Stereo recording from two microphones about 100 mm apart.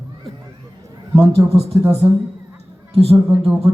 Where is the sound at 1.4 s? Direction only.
40° right (ahead or behind).